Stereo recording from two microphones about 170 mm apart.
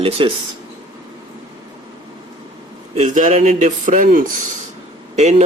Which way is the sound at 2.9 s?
45° right (ahead or behind).